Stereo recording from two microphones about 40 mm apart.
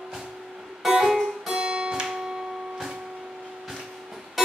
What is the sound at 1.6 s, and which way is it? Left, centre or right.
Music, right.